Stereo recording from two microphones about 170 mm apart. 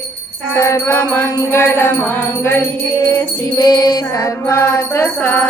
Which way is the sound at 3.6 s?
25° left (ahead or behind).